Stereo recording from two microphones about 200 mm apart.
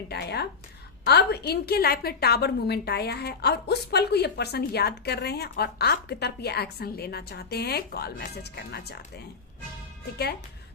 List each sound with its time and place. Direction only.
0.1 s a woman's voice: 55° left (ahead or behind)